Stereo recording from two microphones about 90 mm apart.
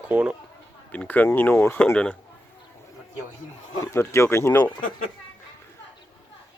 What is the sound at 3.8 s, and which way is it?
Speech, 30° left (ahead or behind).